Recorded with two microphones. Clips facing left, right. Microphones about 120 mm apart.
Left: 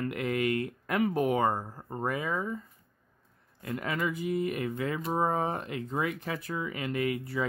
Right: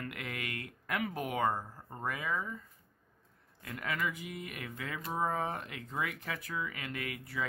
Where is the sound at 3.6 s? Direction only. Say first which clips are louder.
Left 5 dB; 30° left (ahead or behind).